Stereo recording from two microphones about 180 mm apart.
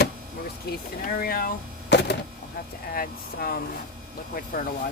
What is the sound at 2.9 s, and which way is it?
Speech, 55° left (ahead or behind).